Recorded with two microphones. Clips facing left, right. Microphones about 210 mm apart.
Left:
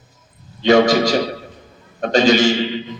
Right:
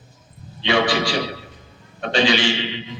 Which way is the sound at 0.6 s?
45° left (ahead or behind).